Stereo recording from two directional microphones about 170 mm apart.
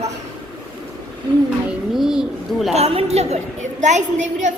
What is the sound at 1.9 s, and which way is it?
Speech, centre (ahead or behind).